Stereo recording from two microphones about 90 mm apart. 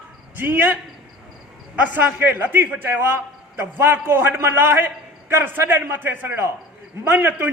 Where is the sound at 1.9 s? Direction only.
20° right (ahead or behind).